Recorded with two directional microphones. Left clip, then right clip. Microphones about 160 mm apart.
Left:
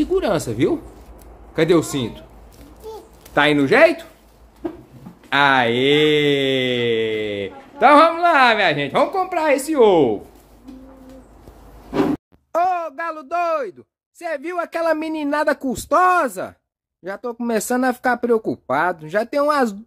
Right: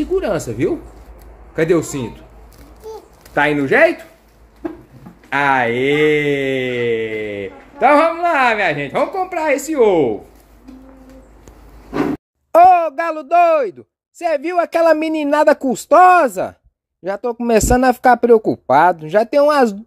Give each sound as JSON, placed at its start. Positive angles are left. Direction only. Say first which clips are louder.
{"t": 0.0, "sound": "mantra", "louder": "right 1 dB", "side_deg": 0}
{"t": 3.3, "sound": "mantra", "louder": "right 1 dB", "side_deg": 0}
{"t": 5.3, "sound": "mantra", "louder": "even", "side_deg": 0}
{"t": 12.5, "sound": "a woman's voice", "louder": "right 10 dB", "side_deg": -30}
{"t": 17.5, "sound": "a woman's voice", "louder": "right 7 dB", "side_deg": -30}